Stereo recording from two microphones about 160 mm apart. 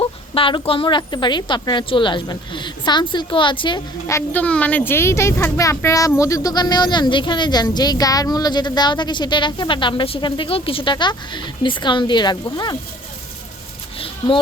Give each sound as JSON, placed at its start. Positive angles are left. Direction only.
{"t": 0.0, "sound": "speech", "side_deg": 35}
{"t": 4.1, "sound": "speech", "side_deg": 10}